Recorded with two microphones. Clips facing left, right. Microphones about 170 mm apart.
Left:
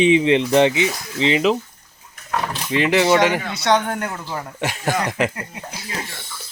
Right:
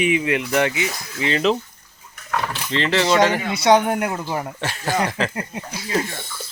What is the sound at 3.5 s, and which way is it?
A man's voice, 15° right (ahead or behind).